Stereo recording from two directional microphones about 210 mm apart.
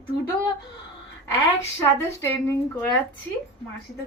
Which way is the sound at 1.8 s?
15° left (ahead or behind).